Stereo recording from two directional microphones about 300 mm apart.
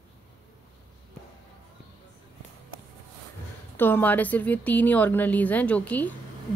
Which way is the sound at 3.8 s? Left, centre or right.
Centre.